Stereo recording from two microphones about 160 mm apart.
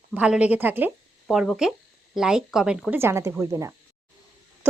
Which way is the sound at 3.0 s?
15° right (ahead or behind).